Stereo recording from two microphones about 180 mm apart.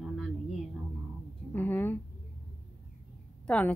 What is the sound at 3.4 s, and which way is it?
Speech, 5° left (ahead or behind).